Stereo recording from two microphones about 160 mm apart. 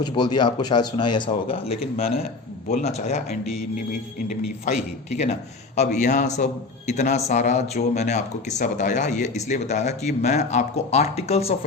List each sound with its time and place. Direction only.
0.0 s a man's voice: 25° left (ahead or behind); by 3.2 s 45° left (ahead or behind)
5.7 s a man's voice: 45° left (ahead or behind)